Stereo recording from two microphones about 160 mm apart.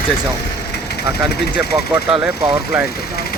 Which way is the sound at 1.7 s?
25° right (ahead or behind).